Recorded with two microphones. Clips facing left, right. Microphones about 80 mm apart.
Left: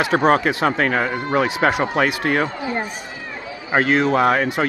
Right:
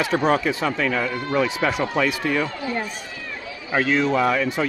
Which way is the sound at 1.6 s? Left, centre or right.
Left.